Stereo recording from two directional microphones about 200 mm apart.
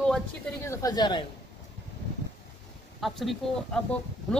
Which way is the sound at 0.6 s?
20° left (ahead or behind).